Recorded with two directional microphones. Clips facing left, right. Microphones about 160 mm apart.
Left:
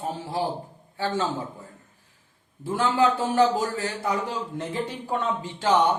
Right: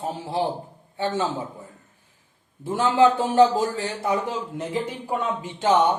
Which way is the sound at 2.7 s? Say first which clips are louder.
Right 4 dB; 25° right (ahead or behind).